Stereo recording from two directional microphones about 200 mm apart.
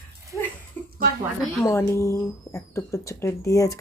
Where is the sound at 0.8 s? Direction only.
10° left (ahead or behind).